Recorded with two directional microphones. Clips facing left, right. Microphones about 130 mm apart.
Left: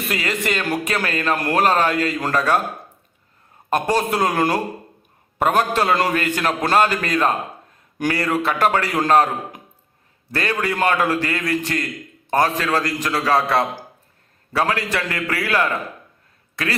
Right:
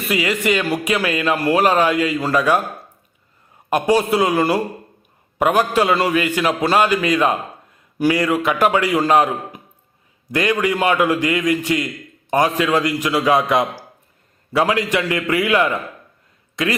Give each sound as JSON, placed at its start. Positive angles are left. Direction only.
{"t": 0.1, "sound": "a man's voice", "side_deg": -10}
{"t": 3.7, "sound": "a man's voice", "side_deg": -10}